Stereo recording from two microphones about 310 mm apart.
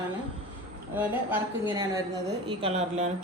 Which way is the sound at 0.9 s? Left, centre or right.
Centre.